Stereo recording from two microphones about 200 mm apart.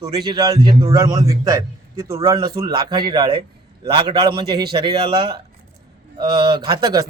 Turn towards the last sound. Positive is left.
turn(degrees=-20)  # may be behind; listen again after turning